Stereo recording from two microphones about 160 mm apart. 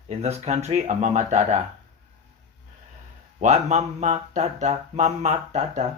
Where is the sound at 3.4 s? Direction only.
45° right (ahead or behind).